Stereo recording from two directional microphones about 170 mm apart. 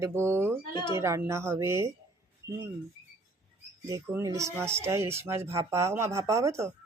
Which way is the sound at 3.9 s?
15° right (ahead or behind).